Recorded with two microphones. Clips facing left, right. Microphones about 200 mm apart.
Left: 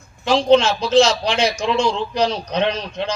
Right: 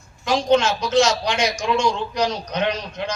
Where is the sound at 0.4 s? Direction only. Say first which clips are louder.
Left 4 dB; 30° left (ahead or behind).